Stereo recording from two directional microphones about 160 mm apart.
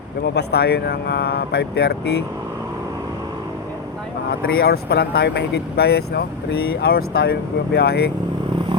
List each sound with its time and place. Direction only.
0.3 s speech: 90° left
4.4 s speech: 80° left